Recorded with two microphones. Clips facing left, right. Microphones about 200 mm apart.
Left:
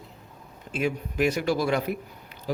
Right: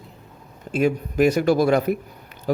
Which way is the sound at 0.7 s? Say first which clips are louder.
Right 7 dB; 45° right (ahead or behind).